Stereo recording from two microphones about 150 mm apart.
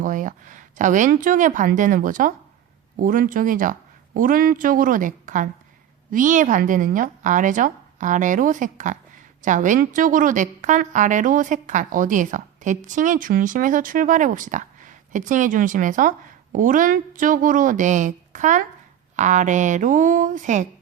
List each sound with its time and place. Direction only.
0.0 s a woman's voice: 60° right (ahead or behind)